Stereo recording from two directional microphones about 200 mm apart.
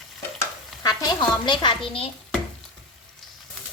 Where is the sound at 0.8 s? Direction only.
20° left (ahead or behind).